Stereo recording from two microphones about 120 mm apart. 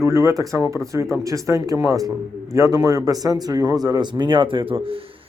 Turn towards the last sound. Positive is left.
turn(degrees=-45)  # may be behind; listen again after turning